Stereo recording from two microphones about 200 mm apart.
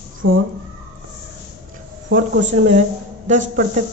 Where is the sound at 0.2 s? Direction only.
90° right.